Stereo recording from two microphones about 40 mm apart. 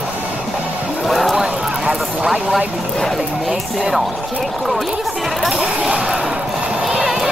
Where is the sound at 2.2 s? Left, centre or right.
Centre.